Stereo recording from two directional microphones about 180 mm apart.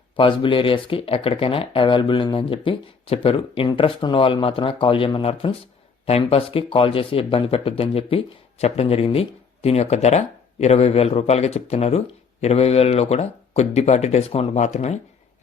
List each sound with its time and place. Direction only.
0.2 s speech: 30° left (ahead or behind)